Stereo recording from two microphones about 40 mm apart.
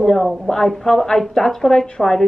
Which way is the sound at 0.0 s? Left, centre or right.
Centre.